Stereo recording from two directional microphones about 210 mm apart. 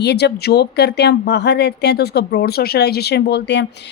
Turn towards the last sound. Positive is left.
turn(degrees=55)  # may be behind; listen again after turning